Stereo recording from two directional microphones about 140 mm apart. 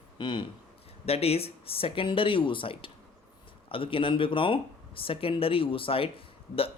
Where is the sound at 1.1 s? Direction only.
45° left (ahead or behind).